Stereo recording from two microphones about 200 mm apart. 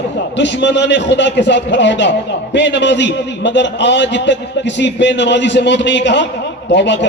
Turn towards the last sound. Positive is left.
turn(degrees=60)  # may be behind; listen again after turning